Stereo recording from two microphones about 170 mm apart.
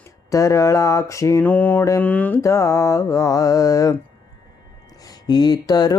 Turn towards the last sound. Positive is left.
turn(degrees=25)  # may be behind; listen again after turning